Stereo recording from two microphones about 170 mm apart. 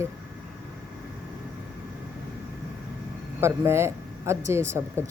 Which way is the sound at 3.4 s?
15° right (ahead or behind).